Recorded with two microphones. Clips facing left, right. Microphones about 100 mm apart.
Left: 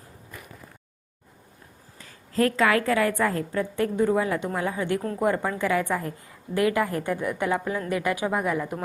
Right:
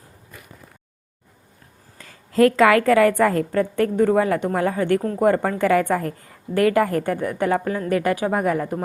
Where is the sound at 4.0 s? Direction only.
60° right (ahead or behind).